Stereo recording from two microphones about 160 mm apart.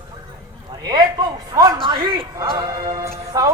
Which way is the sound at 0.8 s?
25° right (ahead or behind).